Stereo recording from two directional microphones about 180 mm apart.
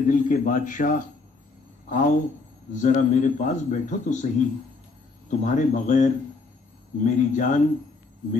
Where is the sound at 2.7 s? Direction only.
45° left (ahead or behind).